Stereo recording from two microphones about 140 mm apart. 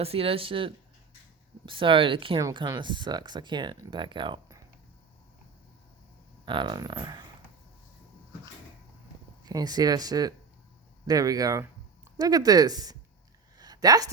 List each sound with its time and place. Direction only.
0.0 s speech: 45° right (ahead or behind)
6.4 s speech: 35° right (ahead or behind)
9.5 s speech: 30° right (ahead or behind)
13.6 s a sound: 25° right (ahead or behind)